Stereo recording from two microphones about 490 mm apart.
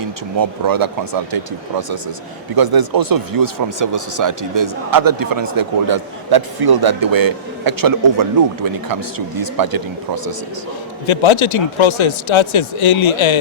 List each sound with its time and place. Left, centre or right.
0.3 s speech: right
11.0 s speech: left